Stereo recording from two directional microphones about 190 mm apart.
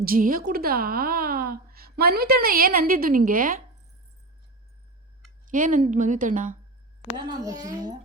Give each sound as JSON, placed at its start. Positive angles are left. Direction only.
{"t": 0.0, "sound": "a woman's voice", "side_deg": -50}
{"t": 5.5, "sound": "a woman's voice", "side_deg": -45}
{"t": 7.3, "sound": "a child's voice", "side_deg": -20}